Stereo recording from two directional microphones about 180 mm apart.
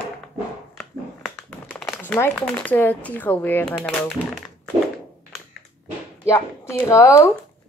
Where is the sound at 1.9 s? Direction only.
10° left (ahead or behind).